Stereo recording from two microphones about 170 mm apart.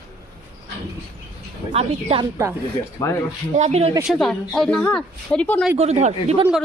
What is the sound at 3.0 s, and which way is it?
Speech, 15° left (ahead or behind).